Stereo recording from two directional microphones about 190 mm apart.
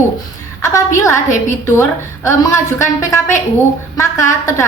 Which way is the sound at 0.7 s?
15° left (ahead or behind).